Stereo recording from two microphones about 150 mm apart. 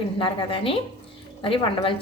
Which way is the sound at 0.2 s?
35° left (ahead or behind).